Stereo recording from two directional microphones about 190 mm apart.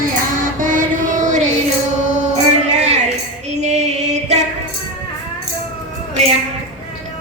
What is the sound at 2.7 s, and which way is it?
Music, 35° right (ahead or behind).